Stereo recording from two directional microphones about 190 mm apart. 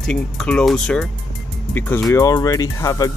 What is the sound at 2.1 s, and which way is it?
Speech, 20° left (ahead or behind).